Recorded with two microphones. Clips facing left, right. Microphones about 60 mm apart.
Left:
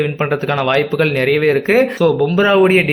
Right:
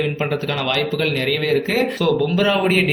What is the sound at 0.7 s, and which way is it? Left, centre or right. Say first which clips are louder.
Speech: left 5 dB; left.